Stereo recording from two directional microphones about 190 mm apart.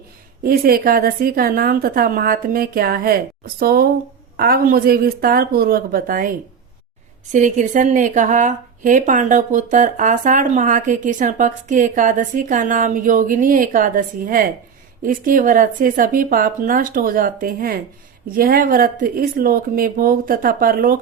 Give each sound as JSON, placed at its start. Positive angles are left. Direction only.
{"t": 0.4, "sound": "a woman's voice", "side_deg": -50}
{"t": 7.3, "sound": "a woman's voice", "side_deg": -40}